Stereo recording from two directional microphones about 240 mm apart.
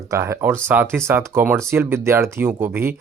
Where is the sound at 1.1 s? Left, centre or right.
Centre.